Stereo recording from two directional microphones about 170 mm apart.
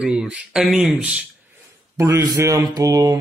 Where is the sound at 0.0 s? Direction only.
5° right (ahead or behind).